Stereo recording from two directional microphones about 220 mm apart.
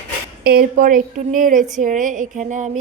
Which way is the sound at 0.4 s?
40° right (ahead or behind).